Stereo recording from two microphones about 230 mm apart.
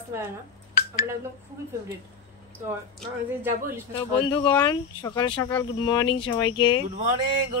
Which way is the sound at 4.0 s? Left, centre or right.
Centre.